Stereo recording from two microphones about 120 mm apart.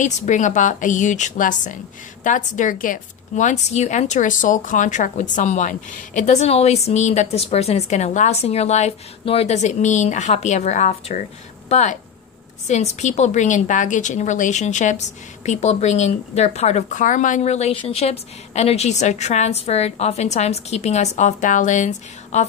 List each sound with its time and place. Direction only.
0.0 s a woman's voice: 90° left; by 8.9 s 65° left (ahead or behind)
9.2 s a woman's voice: 55° left (ahead or behind)
11.7 s a woman's voice: 90° left
12.6 s a woman's voice: 75° left (ahead or behind)